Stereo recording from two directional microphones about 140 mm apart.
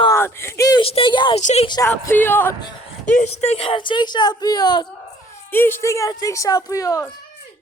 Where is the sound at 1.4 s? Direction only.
60° left (ahead or behind).